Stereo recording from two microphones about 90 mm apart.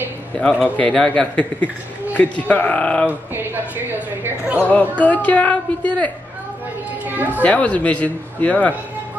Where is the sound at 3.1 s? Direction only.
20° right (ahead or behind).